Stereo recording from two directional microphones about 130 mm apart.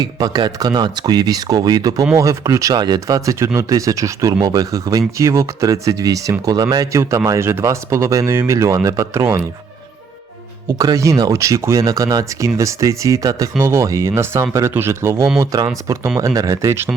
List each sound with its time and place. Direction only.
0.0 s speech: 30° right (ahead or behind)
10.8 s speech: 25° right (ahead or behind)